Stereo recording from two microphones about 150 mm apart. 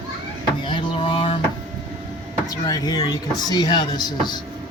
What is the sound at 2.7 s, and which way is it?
Speech, 25° left (ahead or behind).